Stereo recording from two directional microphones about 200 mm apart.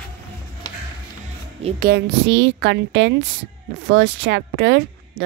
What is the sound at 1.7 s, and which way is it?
A woman's voice, 55° right (ahead or behind).